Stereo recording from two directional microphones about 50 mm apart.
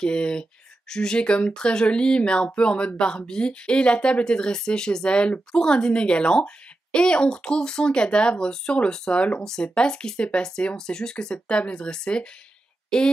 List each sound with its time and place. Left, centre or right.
0.0 s a woman's voice: centre